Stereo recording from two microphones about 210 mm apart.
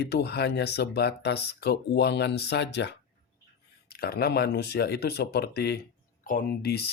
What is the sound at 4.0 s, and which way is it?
Speech, 45° left (ahead or behind).